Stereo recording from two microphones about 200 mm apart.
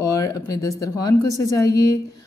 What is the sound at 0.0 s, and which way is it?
A woman's voice, 15° left (ahead or behind).